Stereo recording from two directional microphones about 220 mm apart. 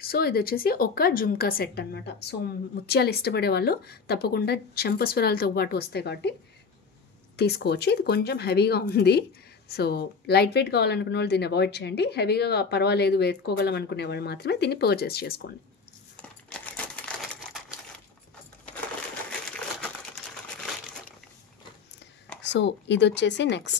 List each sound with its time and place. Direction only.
0.0 s speech: 45° left (ahead or behind)
7.3 s speech: 45° left (ahead or behind)
16.2 s crumpling: 5° left (ahead or behind)
22.4 s speech: 55° left (ahead or behind)